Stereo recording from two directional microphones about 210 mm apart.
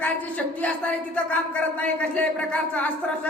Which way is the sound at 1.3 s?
5° left (ahead or behind).